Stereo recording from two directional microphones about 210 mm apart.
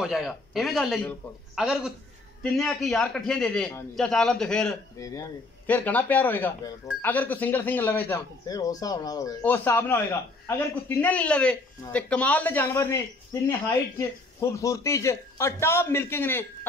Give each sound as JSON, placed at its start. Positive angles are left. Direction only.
{"t": 0.0, "sound": "a man's voice", "side_deg": 0}
{"t": 4.9, "sound": "speech", "side_deg": 15}